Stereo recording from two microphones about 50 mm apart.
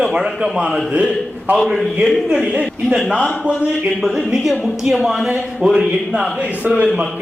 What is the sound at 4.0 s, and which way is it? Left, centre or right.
A man's voice, centre.